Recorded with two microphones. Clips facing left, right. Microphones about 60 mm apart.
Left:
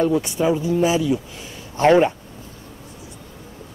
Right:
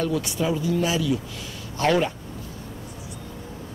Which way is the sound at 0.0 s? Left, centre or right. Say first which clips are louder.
Left 6 dB; left.